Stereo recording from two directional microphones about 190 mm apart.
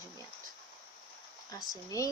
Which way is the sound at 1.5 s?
15° left (ahead or behind).